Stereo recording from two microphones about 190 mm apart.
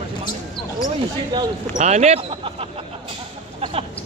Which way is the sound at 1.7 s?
35° right (ahead or behind).